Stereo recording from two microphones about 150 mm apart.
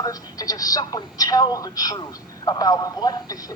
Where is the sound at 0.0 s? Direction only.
25° left (ahead or behind).